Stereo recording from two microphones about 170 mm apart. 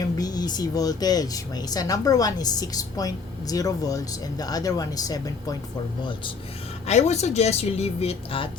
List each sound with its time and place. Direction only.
0.2 s speech: 25° left (ahead or behind)
6.8 s speech: 40° left (ahead or behind)